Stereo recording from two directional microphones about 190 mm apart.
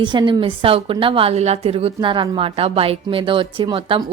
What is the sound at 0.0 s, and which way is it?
A woman's voice, 25° right (ahead or behind).